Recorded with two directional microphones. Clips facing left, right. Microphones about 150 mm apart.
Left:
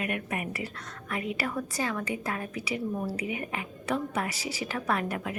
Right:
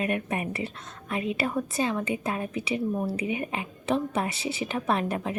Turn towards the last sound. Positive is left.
turn(degrees=-25)  # may be behind; listen again after turning